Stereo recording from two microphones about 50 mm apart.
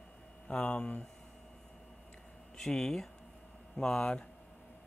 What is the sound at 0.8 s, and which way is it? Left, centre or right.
Speech, centre.